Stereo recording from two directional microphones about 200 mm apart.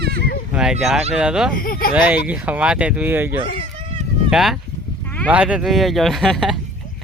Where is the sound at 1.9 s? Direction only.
5° right (ahead or behind).